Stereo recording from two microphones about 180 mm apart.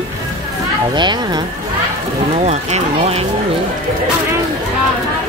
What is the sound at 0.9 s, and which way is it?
Speech, 25° right (ahead or behind).